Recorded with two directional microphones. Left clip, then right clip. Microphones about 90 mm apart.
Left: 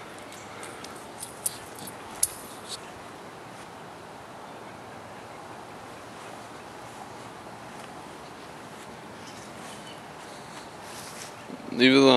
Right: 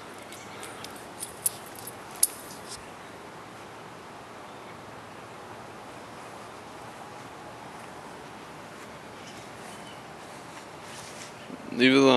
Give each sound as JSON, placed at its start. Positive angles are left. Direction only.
{"t": 11.7, "sound": "speech", "side_deg": 5}